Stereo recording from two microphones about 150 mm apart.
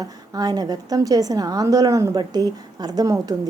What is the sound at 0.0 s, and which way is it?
A woman's voice, 25° right (ahead or behind).